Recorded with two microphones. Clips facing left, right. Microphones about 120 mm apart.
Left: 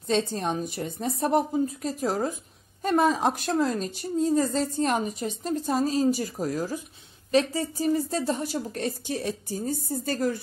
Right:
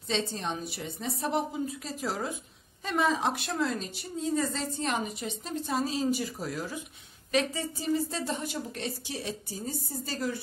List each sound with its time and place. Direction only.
0.1 s a woman's voice: 45° left (ahead or behind)